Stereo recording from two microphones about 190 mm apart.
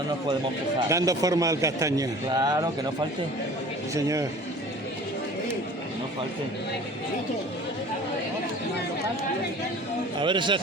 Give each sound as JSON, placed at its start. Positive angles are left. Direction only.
{"t": 0.9, "sound": "a man's voice", "side_deg": -15}
{"t": 3.9, "sound": "a man's voice", "side_deg": -15}
{"t": 10.2, "sound": "a man's voice", "side_deg": -25}